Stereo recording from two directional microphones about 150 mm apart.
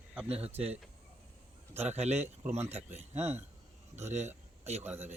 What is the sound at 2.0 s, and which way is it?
Speech, 45° right (ahead or behind).